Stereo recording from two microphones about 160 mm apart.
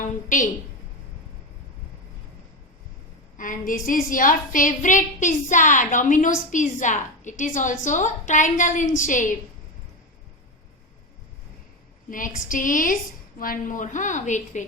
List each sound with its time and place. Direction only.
0.0 s speech: 55° left (ahead or behind)
3.3 s a woman's voice: 55° left (ahead or behind)
12.1 s a woman's voice: 55° left (ahead or behind)